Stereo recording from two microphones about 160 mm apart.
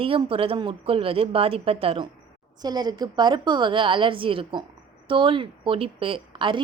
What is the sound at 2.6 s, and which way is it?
A woman's voice, 25° right (ahead or behind).